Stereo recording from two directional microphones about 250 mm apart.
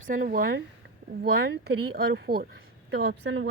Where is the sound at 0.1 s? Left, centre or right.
Right.